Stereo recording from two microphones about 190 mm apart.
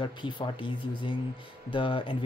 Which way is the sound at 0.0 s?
25° left (ahead or behind).